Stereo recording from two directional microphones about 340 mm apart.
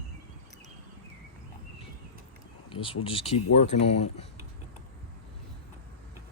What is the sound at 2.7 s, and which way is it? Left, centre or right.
Speech, centre.